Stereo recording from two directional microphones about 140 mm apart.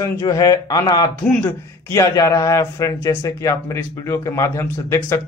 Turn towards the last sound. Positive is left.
turn(degrees=20)  # may be behind; listen again after turning